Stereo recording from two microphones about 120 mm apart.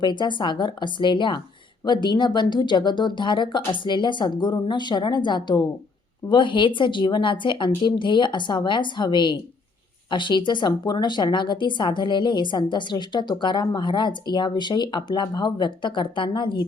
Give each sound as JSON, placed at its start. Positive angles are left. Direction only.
{"t": 0.0, "sound": "speech", "side_deg": 40}